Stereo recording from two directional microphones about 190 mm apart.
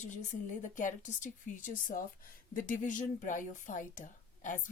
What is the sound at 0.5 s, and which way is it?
A woman's voice, 40° left (ahead or behind).